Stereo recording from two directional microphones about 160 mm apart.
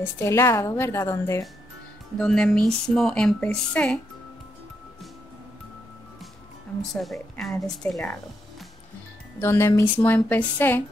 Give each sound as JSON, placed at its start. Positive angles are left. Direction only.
{"t": 0.0, "sound": "a woman's voice", "side_deg": 15}
{"t": 2.1, "sound": "speech", "side_deg": 5}
{"t": 6.8, "sound": "speech", "side_deg": 0}
{"t": 9.4, "sound": "a woman's voice", "side_deg": 15}